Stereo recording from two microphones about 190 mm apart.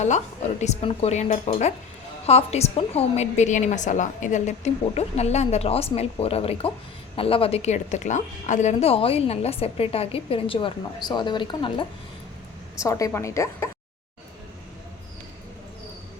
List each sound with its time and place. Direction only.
0.6 s a woman's voice: 35° left (ahead or behind); by 13.7 s 15° left (ahead or behind)